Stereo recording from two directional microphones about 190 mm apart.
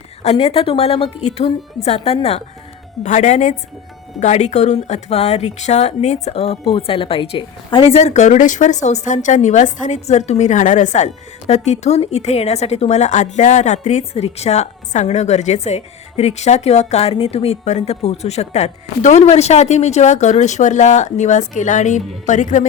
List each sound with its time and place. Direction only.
0.2 s a woman's voice: 35° left (ahead or behind)